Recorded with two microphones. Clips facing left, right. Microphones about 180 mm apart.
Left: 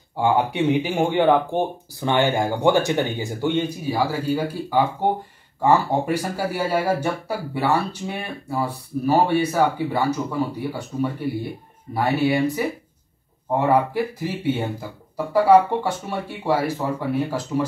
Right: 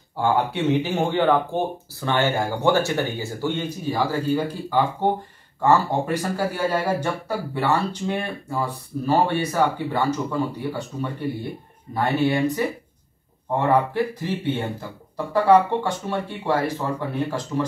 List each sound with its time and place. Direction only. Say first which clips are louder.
0.2 s speech: left 2 dB; 15° left (ahead or behind)